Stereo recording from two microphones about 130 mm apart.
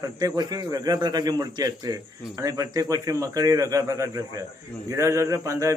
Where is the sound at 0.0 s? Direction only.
30° right (ahead or behind).